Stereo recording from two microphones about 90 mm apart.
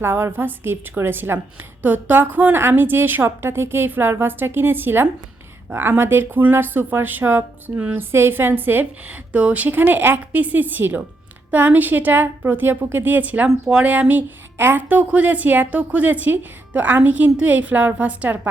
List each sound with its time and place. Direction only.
0.0 s a woman's voice: 25° right (ahead or behind)